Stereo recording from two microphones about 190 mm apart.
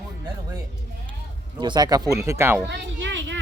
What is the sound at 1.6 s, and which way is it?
Speech, 20° right (ahead or behind).